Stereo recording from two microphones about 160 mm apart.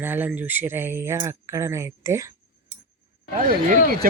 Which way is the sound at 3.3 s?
55° right (ahead or behind).